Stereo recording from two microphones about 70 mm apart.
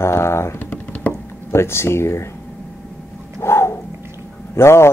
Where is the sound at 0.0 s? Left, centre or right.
Left.